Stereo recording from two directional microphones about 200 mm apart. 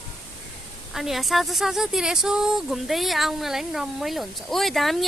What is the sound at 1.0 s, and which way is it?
Speech, centre (ahead or behind).